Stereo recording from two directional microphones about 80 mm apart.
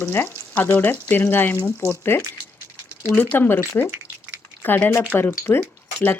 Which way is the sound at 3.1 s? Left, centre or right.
Centre.